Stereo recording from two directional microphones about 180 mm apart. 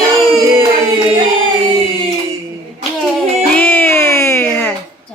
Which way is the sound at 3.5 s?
10° left (ahead or behind).